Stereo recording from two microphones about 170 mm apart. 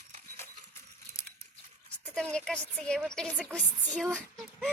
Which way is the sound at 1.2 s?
15° left (ahead or behind).